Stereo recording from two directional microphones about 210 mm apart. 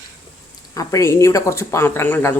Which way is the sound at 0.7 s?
15° left (ahead or behind).